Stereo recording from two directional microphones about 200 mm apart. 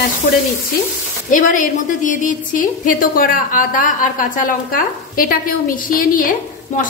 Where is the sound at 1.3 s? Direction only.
40° left (ahead or behind).